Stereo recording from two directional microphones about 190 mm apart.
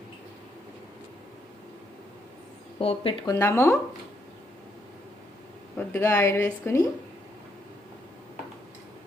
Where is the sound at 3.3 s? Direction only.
15° left (ahead or behind).